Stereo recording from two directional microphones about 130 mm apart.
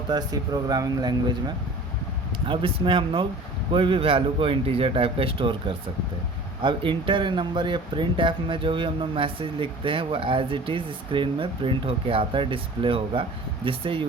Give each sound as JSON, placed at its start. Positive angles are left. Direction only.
{"t": 0.1, "sound": "speech", "side_deg": -30}